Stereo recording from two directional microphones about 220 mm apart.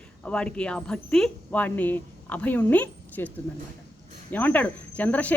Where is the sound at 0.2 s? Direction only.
5° left (ahead or behind).